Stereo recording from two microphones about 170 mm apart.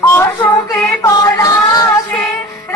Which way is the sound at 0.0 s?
15° left (ahead or behind).